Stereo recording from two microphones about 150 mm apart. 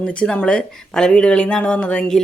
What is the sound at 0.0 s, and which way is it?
Speech, 5° left (ahead or behind).